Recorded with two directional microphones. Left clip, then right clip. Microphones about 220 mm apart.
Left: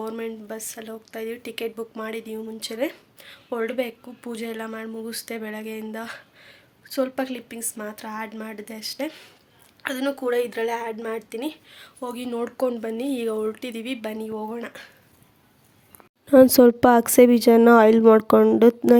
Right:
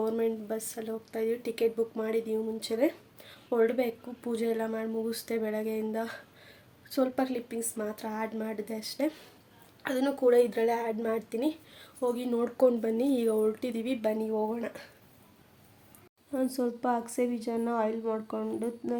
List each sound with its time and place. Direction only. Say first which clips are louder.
0.0 s speech: right 1 dB; 5° right (ahead or behind)
16.3 s a woman's voice: left 18 dB; 50° left (ahead or behind)